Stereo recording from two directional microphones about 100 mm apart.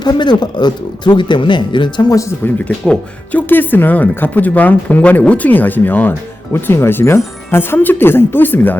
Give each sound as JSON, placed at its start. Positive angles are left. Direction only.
{"t": 0.0, "sound": "speech", "side_deg": 45}
{"t": 2.4, "sound": "speech", "side_deg": 10}